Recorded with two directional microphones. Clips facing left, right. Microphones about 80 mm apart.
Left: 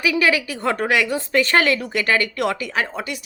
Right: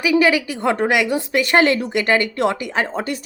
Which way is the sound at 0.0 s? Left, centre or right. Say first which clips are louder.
Right 3 dB; right.